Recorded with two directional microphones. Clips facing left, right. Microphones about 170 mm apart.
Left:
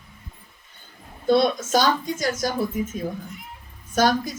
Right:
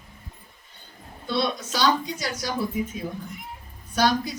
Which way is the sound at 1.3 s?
45° left (ahead or behind).